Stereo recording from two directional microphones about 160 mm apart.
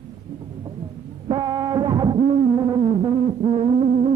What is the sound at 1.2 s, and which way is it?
Music, 25° right (ahead or behind).